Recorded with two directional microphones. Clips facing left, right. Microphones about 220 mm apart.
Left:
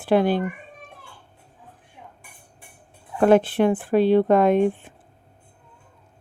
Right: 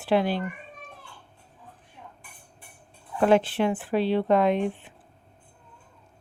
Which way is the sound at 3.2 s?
50° left (ahead or behind).